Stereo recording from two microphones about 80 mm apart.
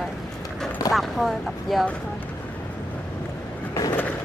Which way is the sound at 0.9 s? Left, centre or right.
Centre.